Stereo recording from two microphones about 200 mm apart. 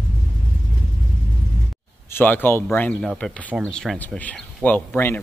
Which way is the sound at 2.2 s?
10° left (ahead or behind).